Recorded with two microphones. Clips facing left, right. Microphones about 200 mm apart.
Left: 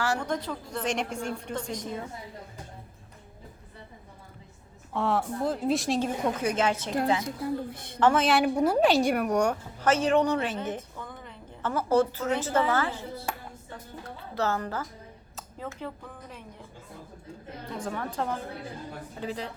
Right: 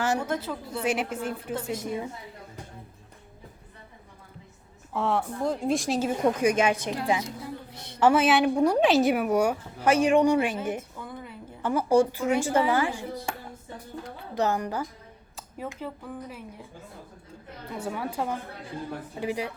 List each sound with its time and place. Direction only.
0.2 s a woman's voice: 5° right (ahead or behind)
4.9 s a woman's voice: centre (ahead or behind)
6.2 s a woman's voice: 15° right (ahead or behind)
7.4 s a woman's voice: 50° left (ahead or behind)
7.9 s a woman's voice: 10° right (ahead or behind)
14.3 s a woman's voice: 15° right (ahead or behind)
17.7 s a woman's voice: 10° right (ahead or behind)